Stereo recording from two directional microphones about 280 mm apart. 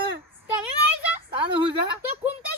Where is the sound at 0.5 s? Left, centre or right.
Centre.